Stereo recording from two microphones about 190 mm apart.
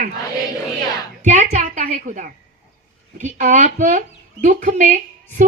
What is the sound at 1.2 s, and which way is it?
A woman's voice, 40° right (ahead or behind).